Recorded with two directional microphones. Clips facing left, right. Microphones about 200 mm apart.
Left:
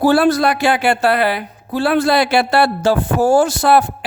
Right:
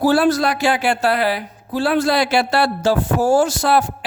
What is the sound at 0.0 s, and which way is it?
Speech, 60° left (ahead or behind).